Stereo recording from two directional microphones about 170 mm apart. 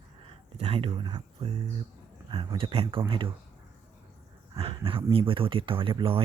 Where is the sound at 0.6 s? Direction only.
30° right (ahead or behind).